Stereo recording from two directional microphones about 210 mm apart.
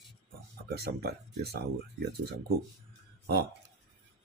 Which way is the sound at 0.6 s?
50° right (ahead or behind).